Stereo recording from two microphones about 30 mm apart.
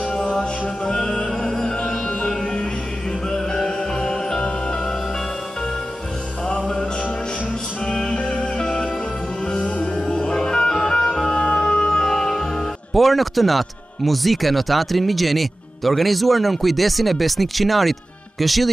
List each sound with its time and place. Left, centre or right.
0.2 s music: left
3.3 s music: centre
6.4 s music: left
7.8 s music: left
10.0 s music: left
12.1 s music: centre
12.9 s speech: centre